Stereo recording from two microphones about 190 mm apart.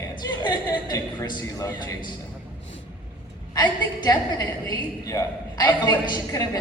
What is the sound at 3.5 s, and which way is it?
A woman's voice, 20° left (ahead or behind).